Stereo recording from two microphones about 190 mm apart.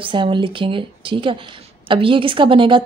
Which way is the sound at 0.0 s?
25° right (ahead or behind).